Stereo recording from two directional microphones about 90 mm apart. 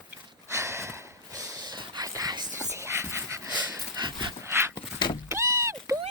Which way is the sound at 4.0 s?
60° right (ahead or behind).